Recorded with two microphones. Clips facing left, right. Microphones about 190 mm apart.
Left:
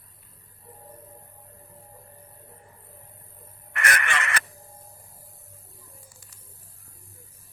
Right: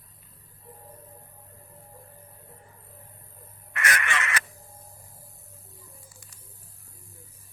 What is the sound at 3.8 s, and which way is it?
Crow, 60° left (ahead or behind).